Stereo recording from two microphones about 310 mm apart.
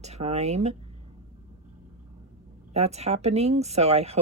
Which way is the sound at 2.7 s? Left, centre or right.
Right.